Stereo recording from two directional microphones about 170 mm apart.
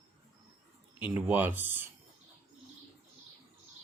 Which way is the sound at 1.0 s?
10° right (ahead or behind).